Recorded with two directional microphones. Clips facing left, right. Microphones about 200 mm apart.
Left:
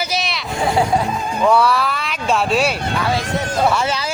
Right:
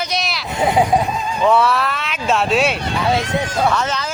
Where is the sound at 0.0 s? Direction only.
5° left (ahead or behind).